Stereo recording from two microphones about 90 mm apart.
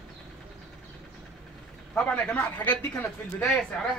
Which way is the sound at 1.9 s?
15° left (ahead or behind).